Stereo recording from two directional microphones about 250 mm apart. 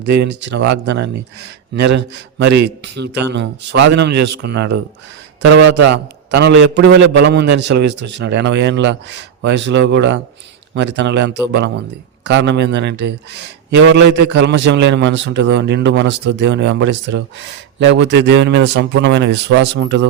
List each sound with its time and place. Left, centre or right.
0.0 s a man's voice: right